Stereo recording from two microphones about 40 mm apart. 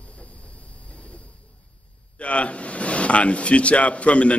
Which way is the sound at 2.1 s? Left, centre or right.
Left.